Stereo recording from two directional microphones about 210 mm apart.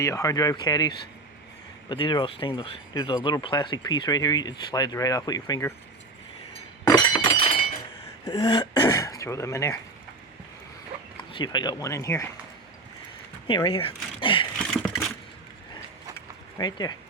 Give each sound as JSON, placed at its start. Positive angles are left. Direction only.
{"t": 0.0, "sound": "speech", "side_deg": 15}
{"t": 6.8, "sound": "thunk", "side_deg": 15}
{"t": 8.2, "sound": "speech", "side_deg": 25}
{"t": 11.2, "sound": "speech", "side_deg": 20}
{"t": 13.7, "sound": "speech", "side_deg": 25}
{"t": 14.6, "sound": "a sound", "side_deg": 0}
{"t": 15.7, "sound": "mechanisms", "side_deg": 20}